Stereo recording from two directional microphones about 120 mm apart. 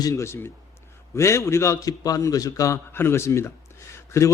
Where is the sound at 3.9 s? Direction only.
25° left (ahead or behind).